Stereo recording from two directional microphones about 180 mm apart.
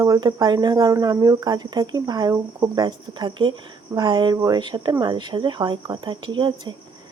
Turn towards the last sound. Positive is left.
turn(degrees=-25)  # may be behind; listen again after turning